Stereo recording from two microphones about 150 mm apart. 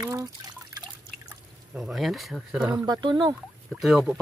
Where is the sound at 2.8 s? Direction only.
30° right (ahead or behind).